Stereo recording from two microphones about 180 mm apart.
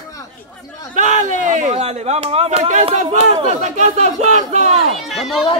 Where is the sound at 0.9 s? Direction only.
45° right (ahead or behind).